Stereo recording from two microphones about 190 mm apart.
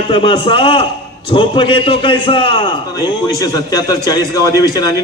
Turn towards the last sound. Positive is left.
turn(degrees=20)  # may be behind; listen again after turning